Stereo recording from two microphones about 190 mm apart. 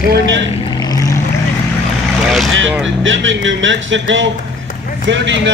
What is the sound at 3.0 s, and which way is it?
Speech, 80° right.